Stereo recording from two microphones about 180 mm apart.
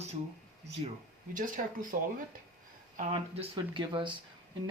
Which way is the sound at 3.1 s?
30° right (ahead or behind).